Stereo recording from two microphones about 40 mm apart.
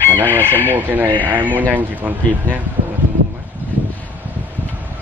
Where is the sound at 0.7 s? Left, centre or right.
Right.